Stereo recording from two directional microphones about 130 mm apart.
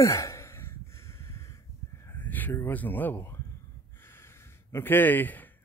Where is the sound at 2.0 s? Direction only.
15° left (ahead or behind).